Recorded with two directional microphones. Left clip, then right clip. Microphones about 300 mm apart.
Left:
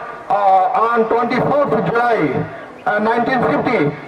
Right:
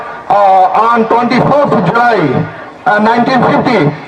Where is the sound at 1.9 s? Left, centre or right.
Right.